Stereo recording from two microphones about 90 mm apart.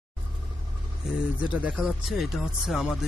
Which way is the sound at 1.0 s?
5° right (ahead or behind).